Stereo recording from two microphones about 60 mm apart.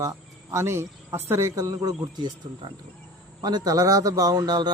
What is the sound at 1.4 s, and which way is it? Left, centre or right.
Speech, right.